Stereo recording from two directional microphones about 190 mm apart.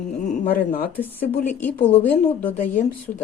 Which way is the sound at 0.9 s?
10° left (ahead or behind).